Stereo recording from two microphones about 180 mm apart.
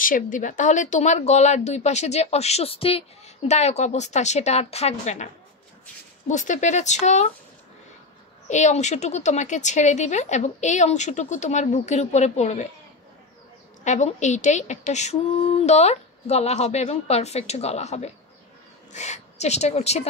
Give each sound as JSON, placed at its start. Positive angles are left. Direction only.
{"t": 0.0, "sound": "speech", "side_deg": 50}
{"t": 8.5, "sound": "speech", "side_deg": 40}
{"t": 13.8, "sound": "speech", "side_deg": 40}